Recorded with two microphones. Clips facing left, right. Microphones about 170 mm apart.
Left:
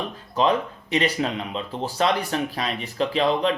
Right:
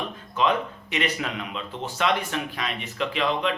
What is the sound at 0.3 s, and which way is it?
A man's voice, 35° left (ahead or behind).